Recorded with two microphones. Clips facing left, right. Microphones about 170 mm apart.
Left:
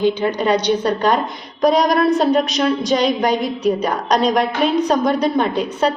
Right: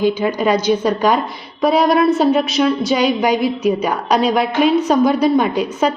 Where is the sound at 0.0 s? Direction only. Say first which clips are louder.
Right 1 dB; 10° right (ahead or behind).